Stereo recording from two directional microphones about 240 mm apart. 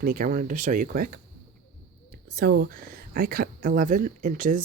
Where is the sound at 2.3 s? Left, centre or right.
Right.